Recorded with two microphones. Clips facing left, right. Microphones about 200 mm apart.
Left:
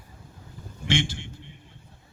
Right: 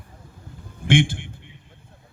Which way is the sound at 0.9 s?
55° right (ahead or behind).